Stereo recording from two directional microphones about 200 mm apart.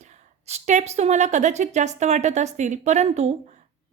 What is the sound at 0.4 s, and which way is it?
A woman's voice, 35° right (ahead or behind).